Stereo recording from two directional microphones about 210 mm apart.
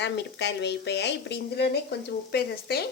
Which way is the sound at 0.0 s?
55° left (ahead or behind).